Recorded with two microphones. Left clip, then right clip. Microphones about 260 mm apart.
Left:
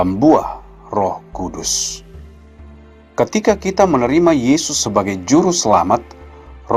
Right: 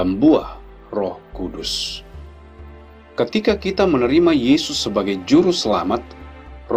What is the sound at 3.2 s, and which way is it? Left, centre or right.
Speech, left.